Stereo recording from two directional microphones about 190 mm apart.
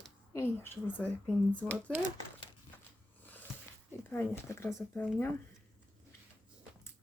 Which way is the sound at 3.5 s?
5° right (ahead or behind).